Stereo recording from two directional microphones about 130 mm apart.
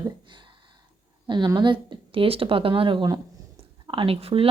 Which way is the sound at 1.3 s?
35° right (ahead or behind).